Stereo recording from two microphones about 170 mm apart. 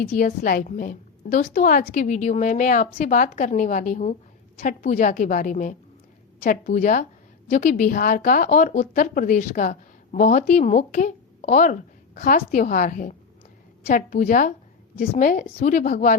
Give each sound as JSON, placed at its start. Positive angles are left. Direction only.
{"t": 0.2, "sound": "a woman's voice", "side_deg": 60}